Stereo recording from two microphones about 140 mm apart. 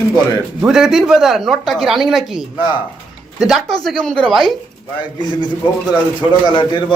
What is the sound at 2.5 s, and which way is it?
Speech, 35° left (ahead or behind).